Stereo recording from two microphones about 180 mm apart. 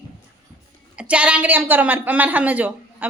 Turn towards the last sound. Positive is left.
turn(degrees=-10)  # may be behind; listen again after turning